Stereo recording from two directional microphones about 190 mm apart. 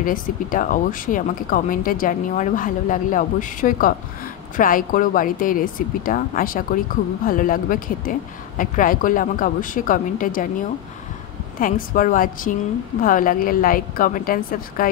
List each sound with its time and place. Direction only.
0.0 s a woman's voice: 45° left (ahead or behind)
11.6 s a woman's voice: 45° left (ahead or behind)